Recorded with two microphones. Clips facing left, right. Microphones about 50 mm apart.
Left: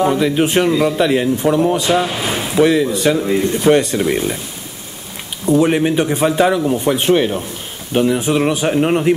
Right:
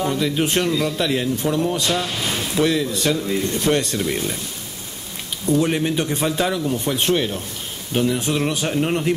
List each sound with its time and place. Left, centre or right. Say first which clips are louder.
0.0 s a man's voice: left 6 dB; centre
5.5 s a man's voice: left 6 dB; centre